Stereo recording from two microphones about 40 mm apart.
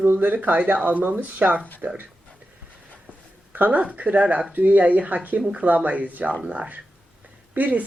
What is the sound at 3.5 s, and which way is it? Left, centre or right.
Speech, right.